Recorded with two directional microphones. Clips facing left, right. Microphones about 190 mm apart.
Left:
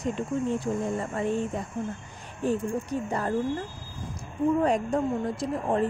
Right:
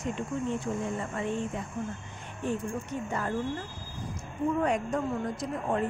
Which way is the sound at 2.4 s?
35° left (ahead or behind).